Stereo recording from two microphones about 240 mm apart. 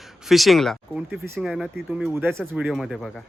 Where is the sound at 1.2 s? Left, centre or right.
Centre.